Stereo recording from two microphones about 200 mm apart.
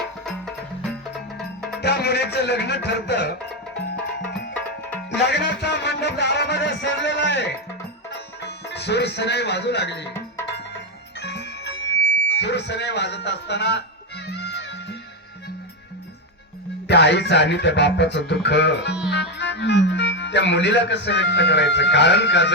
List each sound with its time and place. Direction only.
0.3 s music: centre (ahead or behind)
1.8 s music: 55° left (ahead or behind)
5.1 s music: 60° left (ahead or behind)
11.2 s music: 60° left (ahead or behind)
16.9 s music: 60° left (ahead or behind)
19.1 s speech: 60° left (ahead or behind)